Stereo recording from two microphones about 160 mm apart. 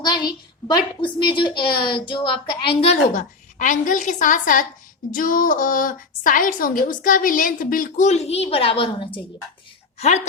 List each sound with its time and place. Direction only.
0.0 s a woman's voice: 25° left (ahead or behind)